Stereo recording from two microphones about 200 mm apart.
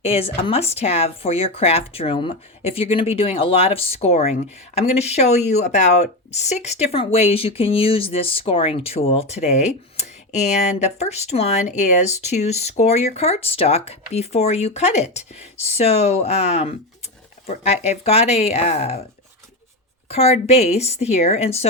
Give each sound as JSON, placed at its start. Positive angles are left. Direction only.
{"t": 0.0, "sound": "speech", "side_deg": 30}
{"t": 20.1, "sound": "speech", "side_deg": 30}